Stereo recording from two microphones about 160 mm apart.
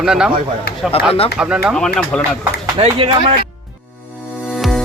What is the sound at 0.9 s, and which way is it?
Speech, 35° left (ahead or behind).